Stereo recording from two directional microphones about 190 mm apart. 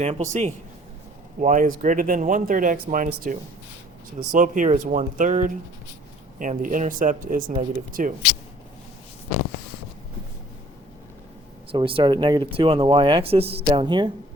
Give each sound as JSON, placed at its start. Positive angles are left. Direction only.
{"t": 0.0, "sound": "speech", "side_deg": -35}
{"t": 11.7, "sound": "speech", "side_deg": -30}